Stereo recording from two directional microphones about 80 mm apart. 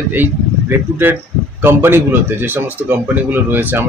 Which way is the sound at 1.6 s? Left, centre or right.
Right.